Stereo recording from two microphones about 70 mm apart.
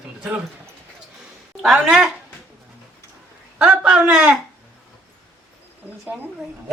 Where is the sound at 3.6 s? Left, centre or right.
Centre.